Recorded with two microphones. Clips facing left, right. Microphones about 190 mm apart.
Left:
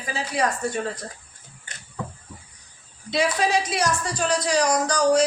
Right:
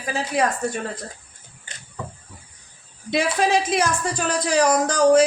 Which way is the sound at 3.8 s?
55° right (ahead or behind).